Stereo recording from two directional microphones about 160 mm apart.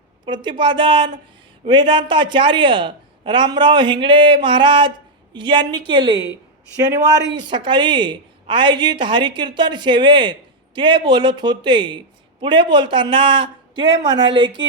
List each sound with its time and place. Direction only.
0.3 s a woman's voice: 30° right (ahead or behind)
7.3 s a woman's voice: 30° right (ahead or behind)